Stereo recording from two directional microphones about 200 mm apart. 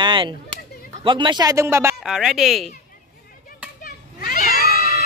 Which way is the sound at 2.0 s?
Centre (ahead or behind).